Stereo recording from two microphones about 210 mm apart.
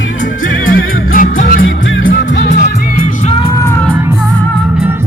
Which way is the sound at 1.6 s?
65° left (ahead or behind).